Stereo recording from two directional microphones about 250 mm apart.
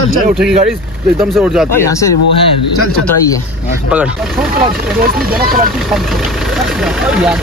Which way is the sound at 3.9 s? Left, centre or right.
Centre.